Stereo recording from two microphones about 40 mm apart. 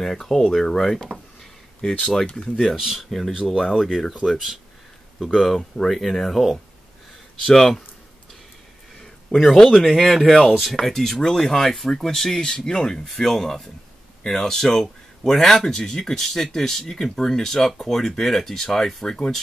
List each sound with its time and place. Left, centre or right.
0.0 s speech: centre
2.6 s speech: centre
5.3 s speech: centre
7.4 s speech: centre
9.0 s a sound: centre
9.8 s speech: centre
13.1 s speech: centre